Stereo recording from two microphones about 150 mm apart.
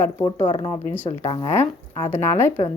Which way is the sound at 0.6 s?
15° left (ahead or behind).